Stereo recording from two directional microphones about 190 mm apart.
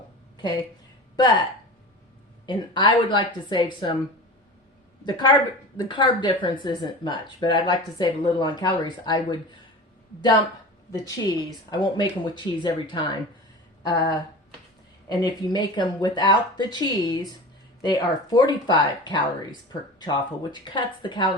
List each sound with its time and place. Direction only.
0.3 s speech: 20° left (ahead or behind)
2.5 s speech: 25° left (ahead or behind)
5.0 s speech: 20° left (ahead or behind)
10.9 s speech: 20° left (ahead or behind)
15.2 s speech: 25° left (ahead or behind)